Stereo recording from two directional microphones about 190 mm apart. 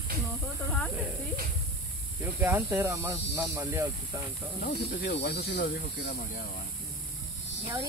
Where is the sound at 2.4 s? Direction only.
10° right (ahead or behind).